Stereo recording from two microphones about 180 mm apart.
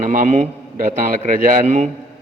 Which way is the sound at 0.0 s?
50° right (ahead or behind).